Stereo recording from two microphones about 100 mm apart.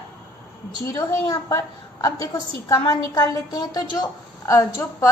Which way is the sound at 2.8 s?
40° left (ahead or behind).